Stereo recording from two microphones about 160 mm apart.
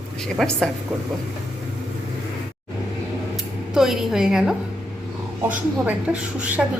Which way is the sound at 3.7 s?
Centre (ahead or behind).